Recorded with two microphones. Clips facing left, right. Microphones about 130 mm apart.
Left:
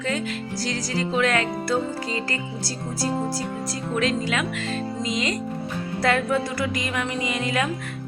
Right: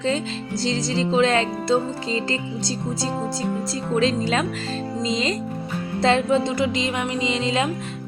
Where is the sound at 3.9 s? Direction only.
30° right (ahead or behind).